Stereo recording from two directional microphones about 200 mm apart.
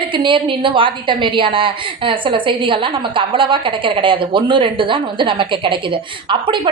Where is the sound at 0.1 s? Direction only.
25° right (ahead or behind).